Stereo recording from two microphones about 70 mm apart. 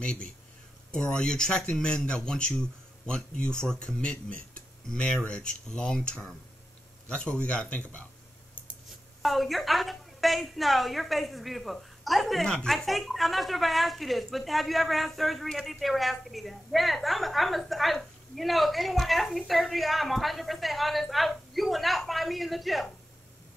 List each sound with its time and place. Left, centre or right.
0.0 s speech: centre
9.2 s a woman's voice: centre